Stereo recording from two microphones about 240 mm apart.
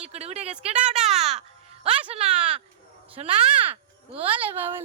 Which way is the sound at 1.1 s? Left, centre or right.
Right.